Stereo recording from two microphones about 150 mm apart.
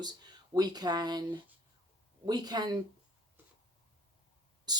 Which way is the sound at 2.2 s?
25° right (ahead or behind).